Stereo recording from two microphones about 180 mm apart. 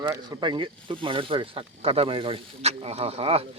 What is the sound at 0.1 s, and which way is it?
Speech, 25° right (ahead or behind).